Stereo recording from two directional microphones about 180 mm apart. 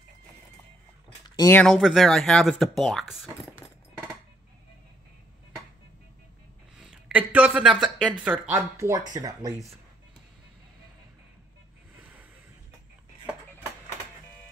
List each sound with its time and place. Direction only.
1.5 s speech: 5° left (ahead or behind)
6.8 s speech: 5° right (ahead or behind)